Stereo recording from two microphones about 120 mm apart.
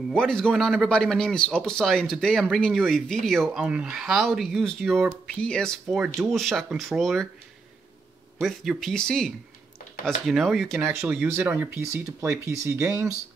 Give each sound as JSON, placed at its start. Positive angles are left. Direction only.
{"t": 0.1, "sound": "a man's voice", "side_deg": 5}
{"t": 3.6, "sound": "a man's voice", "side_deg": -10}
{"t": 8.4, "sound": "a man's voice", "side_deg": 0}
{"t": 10.8, "sound": "speech", "side_deg": -20}